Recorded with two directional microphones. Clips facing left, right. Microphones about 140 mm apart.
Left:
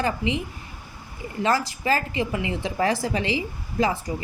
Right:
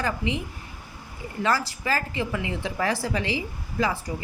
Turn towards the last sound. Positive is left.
turn(degrees=20)  # may be behind; listen again after turning